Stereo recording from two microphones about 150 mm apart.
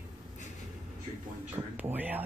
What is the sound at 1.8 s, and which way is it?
Speech, 10° right (ahead or behind).